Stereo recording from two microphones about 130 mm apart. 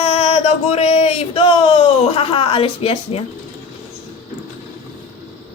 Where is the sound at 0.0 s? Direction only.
55° left (ahead or behind).